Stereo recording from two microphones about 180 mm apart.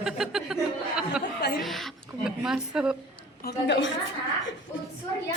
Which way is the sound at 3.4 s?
65° left (ahead or behind).